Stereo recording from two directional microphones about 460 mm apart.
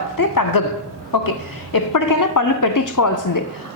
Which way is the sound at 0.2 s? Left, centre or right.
Left.